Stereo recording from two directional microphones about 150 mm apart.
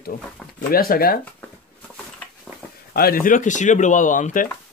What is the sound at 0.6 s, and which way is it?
Speech, 80° left.